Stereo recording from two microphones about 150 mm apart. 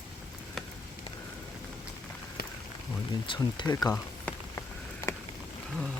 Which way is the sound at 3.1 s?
30° left (ahead or behind).